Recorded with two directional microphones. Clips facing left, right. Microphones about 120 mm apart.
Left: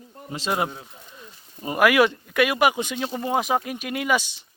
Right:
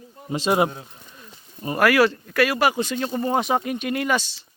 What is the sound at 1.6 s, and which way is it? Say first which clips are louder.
Speech: even; 15° left (ahead or behind).